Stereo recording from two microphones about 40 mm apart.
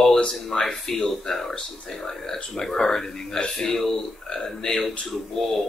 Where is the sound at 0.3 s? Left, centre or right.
Centre.